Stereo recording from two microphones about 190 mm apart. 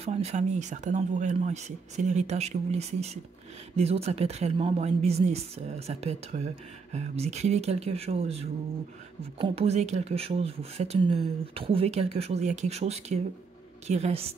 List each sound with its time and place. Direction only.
0.0 s a woman's voice: 35° right (ahead or behind)